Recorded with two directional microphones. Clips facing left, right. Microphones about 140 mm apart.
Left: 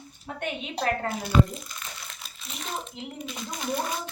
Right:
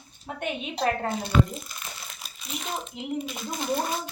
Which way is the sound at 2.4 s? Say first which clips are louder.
Right 2 dB; 10° right (ahead or behind).